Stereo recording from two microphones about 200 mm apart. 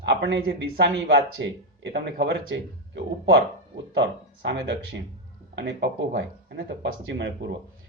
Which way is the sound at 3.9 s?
60° right (ahead or behind).